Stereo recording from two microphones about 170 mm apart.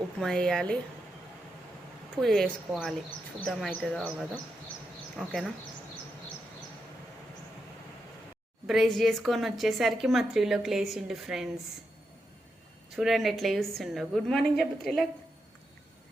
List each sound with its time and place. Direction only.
0.2 s a woman's voice: 5° left (ahead or behind)
2.2 s a woman's voice: centre (ahead or behind)
8.6 s a woman's voice: centre (ahead or behind)
13.0 s a woman's voice: centre (ahead or behind)